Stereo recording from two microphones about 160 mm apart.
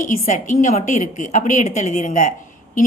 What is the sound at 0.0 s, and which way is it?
A woman's voice, 50° left (ahead or behind).